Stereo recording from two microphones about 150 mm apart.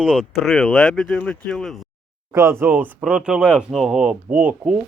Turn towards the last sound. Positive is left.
turn(degrees=-10)  # may be behind; listen again after turning